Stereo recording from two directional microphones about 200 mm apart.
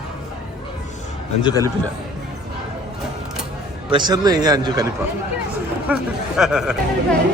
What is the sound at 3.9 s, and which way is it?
Speech, 20° right (ahead or behind).